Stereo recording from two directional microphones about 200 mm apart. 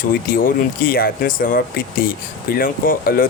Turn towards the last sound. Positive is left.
turn(degrees=45)  # may be behind; listen again after turning